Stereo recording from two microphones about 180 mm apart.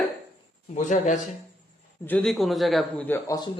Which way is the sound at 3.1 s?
15° left (ahead or behind).